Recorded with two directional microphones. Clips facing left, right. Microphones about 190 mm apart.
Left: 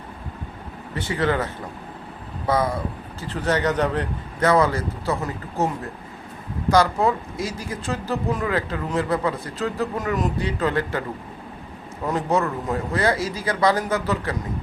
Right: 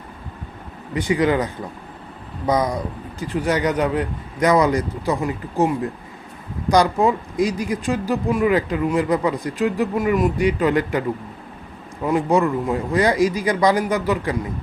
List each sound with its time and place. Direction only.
0.9 s speech: 15° right (ahead or behind)
2.5 s speech: 15° right (ahead or behind)
12.0 s speech: 10° right (ahead or behind)